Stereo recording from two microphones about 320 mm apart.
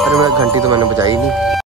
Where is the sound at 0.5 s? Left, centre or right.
Centre.